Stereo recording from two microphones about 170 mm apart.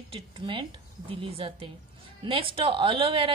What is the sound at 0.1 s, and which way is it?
A woman's voice, 30° right (ahead or behind).